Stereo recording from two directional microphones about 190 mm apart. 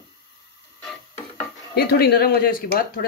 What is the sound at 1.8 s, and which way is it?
Speech, 55° left (ahead or behind).